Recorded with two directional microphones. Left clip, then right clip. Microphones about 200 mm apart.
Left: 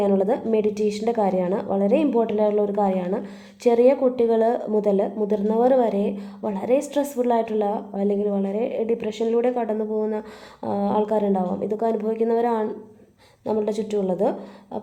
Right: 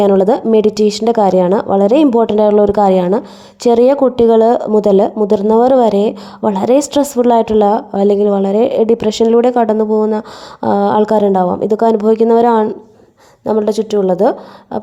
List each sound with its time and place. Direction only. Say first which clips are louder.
0.0 s a woman's voice: right 11 dB; 40° right (ahead or behind)